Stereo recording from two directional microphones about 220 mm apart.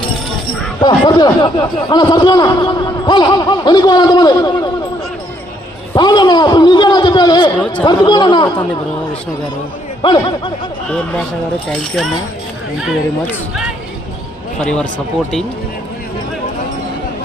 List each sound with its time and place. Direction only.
0.8 s a man's voice: 20° left (ahead or behind)
5.9 s a man's voice: 20° left (ahead or behind)
10.0 s a man's voice: 20° left (ahead or behind)
11.7 s speech: centre (ahead or behind)
14.6 s speech: 5° left (ahead or behind)